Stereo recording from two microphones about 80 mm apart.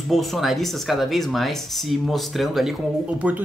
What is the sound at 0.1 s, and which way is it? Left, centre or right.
Speech, centre.